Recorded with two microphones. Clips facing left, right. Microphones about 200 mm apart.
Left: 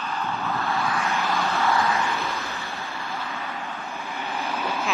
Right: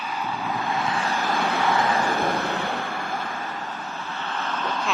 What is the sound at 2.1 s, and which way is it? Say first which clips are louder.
Vehicle: right 6 dB; 50° right (ahead or behind).